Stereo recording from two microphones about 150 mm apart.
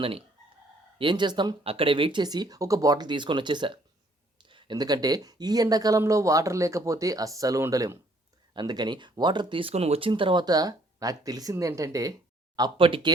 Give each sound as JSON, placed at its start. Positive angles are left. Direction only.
{"t": 0.9, "sound": "speech", "side_deg": -30}